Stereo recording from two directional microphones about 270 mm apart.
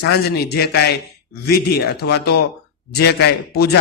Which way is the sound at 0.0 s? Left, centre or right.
Left.